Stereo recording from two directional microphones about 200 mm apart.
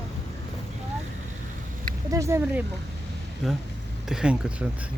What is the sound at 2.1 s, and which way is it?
Speech, 15° right (ahead or behind).